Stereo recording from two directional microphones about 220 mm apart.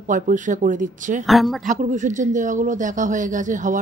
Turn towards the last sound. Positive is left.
turn(degrees=-35)  # may be behind; listen again after turning